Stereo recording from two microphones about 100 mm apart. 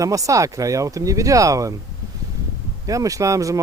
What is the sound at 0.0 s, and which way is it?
Speech, 35° right (ahead or behind).